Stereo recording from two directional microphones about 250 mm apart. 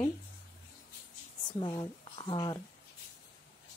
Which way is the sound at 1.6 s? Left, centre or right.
Centre.